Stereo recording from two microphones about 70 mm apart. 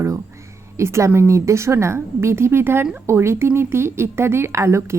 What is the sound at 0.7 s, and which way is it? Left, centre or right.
A woman's voice, right.